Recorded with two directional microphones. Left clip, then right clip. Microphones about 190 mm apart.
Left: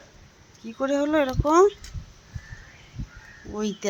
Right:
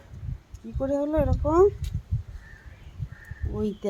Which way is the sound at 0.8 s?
5° left (ahead or behind).